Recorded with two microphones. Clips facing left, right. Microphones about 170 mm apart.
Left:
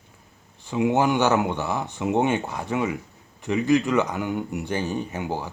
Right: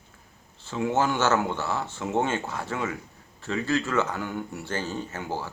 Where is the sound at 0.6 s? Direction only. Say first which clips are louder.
Left 4 dB; 15° left (ahead or behind).